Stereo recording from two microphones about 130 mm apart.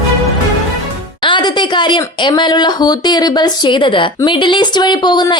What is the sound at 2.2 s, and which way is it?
A woman's voice, 35° left (ahead or behind).